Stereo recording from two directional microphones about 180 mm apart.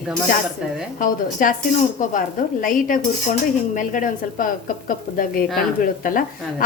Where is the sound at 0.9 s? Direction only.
50° left (ahead or behind).